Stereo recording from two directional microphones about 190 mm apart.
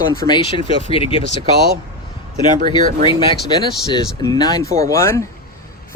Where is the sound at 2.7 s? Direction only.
25° left (ahead or behind).